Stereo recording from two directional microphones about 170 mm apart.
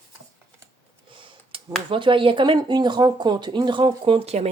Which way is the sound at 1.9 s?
30° right (ahead or behind).